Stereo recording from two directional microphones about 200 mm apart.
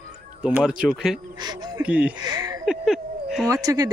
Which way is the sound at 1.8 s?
5° right (ahead or behind).